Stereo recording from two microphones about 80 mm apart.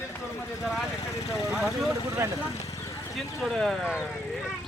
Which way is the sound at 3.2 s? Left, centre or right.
Centre.